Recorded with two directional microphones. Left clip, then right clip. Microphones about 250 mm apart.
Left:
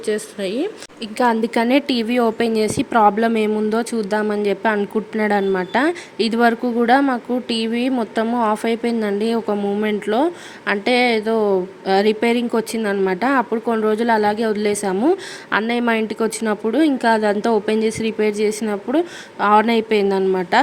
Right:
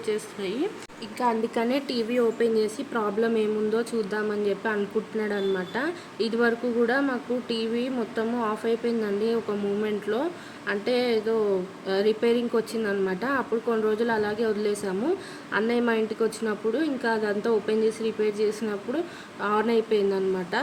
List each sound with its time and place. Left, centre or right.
0.0 s a woman's voice: left